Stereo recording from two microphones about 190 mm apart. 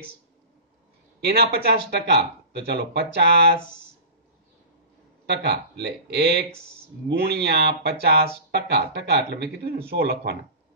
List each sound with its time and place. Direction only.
1.2 s speech: 55° right (ahead or behind)
5.2 s speech: 60° right (ahead or behind)